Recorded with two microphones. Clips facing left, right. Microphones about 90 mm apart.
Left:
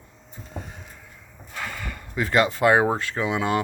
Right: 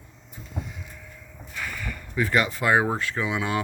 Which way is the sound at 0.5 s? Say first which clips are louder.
Right 1 dB; 45° left (ahead or behind).